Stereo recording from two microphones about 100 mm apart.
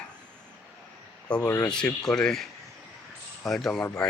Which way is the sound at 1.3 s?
10° left (ahead or behind).